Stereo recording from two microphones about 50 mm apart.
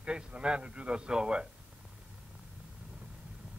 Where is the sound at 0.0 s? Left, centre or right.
Centre.